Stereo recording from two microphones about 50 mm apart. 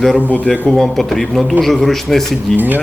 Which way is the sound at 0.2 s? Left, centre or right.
Left.